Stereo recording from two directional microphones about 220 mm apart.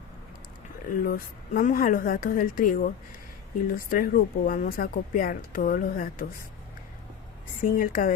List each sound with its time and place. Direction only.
0.9 s speech: 40° left (ahead or behind)
7.6 s speech: 40° left (ahead or behind)